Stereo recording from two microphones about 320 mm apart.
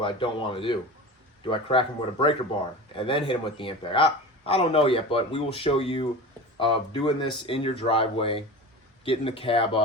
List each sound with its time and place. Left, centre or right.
0.0 s speech: centre